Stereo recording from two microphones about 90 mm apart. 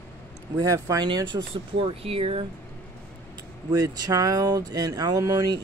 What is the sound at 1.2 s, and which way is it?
Speech, 75° right (ahead or behind).